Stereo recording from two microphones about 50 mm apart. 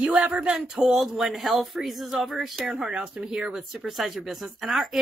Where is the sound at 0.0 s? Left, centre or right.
Centre.